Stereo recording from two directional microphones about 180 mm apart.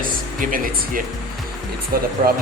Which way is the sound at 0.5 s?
50° right (ahead or behind).